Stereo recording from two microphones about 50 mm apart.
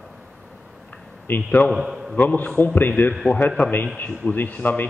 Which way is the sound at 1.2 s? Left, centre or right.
Left.